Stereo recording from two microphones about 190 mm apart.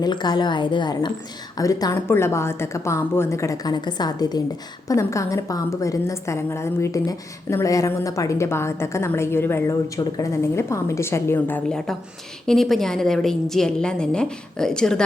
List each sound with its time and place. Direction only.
0.0 s a woman's voice: 20° left (ahead or behind); by 15.0 s 5° left (ahead or behind)